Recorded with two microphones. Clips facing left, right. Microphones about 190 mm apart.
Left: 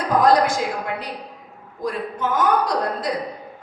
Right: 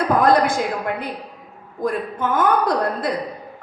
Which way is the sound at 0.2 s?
55° right (ahead or behind).